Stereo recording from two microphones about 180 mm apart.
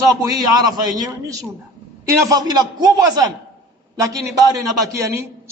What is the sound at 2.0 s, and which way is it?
A man's voice, 20° right (ahead or behind).